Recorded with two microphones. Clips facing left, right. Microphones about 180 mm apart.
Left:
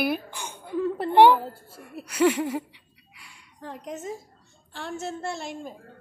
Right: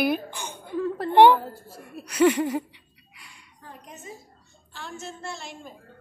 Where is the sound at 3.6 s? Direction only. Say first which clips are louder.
Left 8 dB; 90° left.